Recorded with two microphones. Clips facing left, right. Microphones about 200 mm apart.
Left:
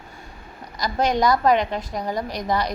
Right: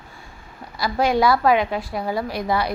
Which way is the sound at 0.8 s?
10° right (ahead or behind).